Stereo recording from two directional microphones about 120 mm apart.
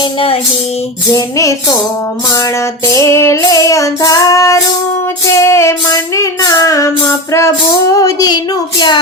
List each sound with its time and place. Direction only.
1.1 s music: 25° left (ahead or behind)
2.9 s music: 25° left (ahead or behind)